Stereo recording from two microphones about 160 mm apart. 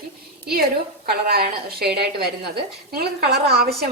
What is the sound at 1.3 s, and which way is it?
A woman's voice, 75° right (ahead or behind).